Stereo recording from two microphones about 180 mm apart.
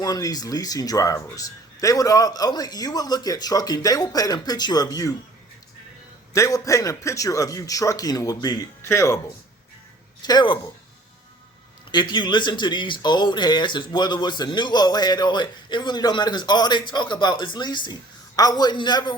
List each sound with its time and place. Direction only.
0.0 s speech: 20° left (ahead or behind)
6.3 s a man's voice: 15° left (ahead or behind)
10.2 s speech: 25° left (ahead or behind)
11.9 s speech: 25° left (ahead or behind)